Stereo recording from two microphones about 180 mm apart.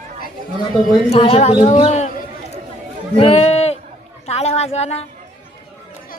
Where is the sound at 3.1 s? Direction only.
35° left (ahead or behind).